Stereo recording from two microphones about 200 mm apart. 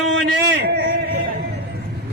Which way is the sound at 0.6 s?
55° right (ahead or behind).